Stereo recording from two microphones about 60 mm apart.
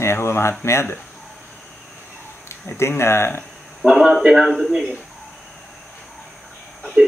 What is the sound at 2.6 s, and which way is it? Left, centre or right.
Speech, left.